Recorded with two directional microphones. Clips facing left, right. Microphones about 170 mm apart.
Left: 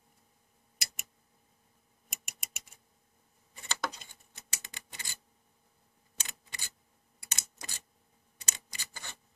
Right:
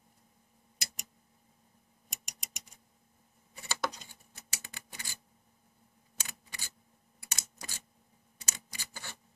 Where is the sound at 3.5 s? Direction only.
5° right (ahead or behind).